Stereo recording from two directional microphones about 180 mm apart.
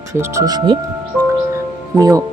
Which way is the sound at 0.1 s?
15° right (ahead or behind).